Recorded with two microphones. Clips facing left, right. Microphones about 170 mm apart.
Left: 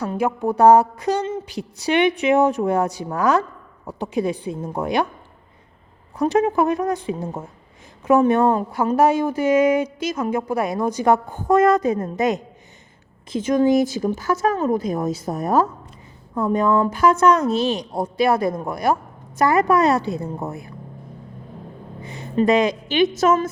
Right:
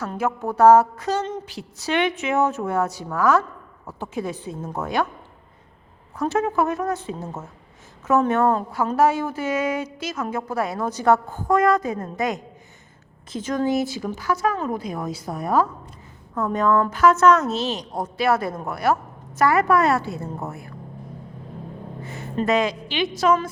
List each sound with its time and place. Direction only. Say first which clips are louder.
0.0 s a woman's voice: left 4 dB; 15° left (ahead or behind)
6.1 s a woman's voice: left 4 dB; 15° left (ahead or behind)
13.8 s speech: left 4 dB; 40° left (ahead or behind)
16.3 s a woman's voice: left 2 dB; 10° left (ahead or behind)
22.0 s speech: left 5 dB; 20° left (ahead or behind)
22.7 s speech: left 7 dB; 45° left (ahead or behind)